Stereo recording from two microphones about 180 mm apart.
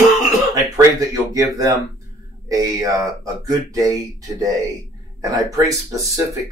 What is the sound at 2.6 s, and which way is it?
Speech, 20° right (ahead or behind).